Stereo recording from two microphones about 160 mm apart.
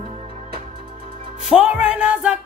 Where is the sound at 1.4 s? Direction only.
5° right (ahead or behind).